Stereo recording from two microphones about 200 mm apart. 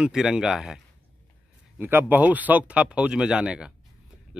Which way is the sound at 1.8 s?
10° right (ahead or behind).